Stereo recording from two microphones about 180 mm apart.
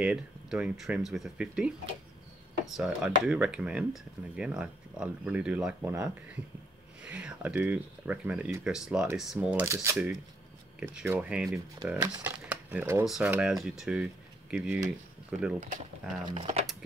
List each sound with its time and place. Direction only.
0.0 s speech: 5° right (ahead or behind)
2.7 s speech: 5° right (ahead or behind)
13.0 s speech: centre (ahead or behind)
16.3 s speech: 30° right (ahead or behind)